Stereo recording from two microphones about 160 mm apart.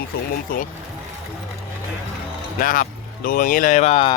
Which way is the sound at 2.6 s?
55° left (ahead or behind).